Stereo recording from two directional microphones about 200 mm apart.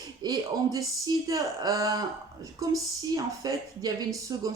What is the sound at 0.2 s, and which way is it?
Speech, 20° right (ahead or behind).